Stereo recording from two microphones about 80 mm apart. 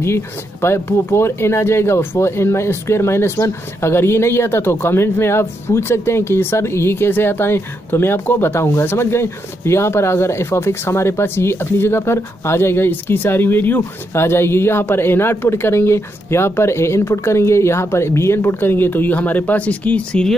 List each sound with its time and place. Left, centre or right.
0.0 s speech: left; by 20.3 s centre